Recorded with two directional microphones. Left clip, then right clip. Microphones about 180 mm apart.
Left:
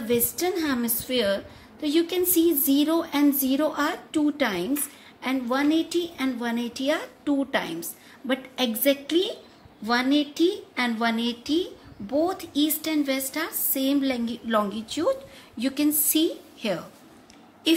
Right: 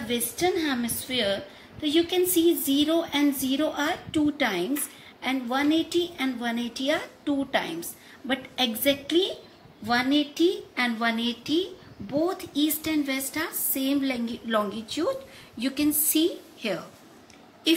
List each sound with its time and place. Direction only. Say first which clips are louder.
0.1 s a woman's voice: left 1 dB; 65° left (ahead or behind)